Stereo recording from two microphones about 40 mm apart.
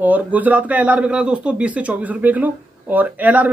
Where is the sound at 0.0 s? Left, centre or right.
Right.